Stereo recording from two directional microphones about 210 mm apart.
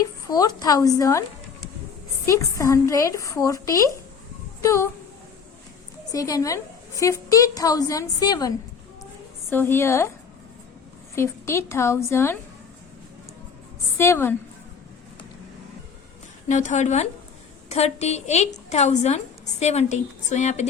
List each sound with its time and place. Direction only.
0.3 s a woman's voice: 20° left (ahead or behind)
2.2 s a woman's voice: 15° left (ahead or behind)
6.1 s a woman's voice: 15° left (ahead or behind)
11.1 s a woman's voice: 15° left (ahead or behind)
14.0 s a woman's voice: 10° left (ahead or behind)
16.5 s a woman's voice: 35° left (ahead or behind)